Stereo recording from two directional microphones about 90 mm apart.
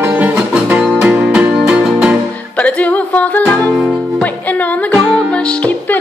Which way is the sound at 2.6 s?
15° left (ahead or behind).